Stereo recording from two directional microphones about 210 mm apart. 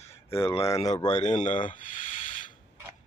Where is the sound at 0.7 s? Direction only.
15° left (ahead or behind).